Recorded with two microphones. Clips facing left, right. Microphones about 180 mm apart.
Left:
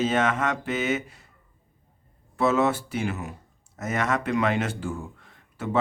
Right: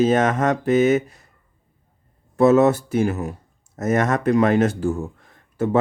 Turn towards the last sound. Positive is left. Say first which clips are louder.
# right 8 dB
turn(degrees=-40)  # may be behind; listen again after turning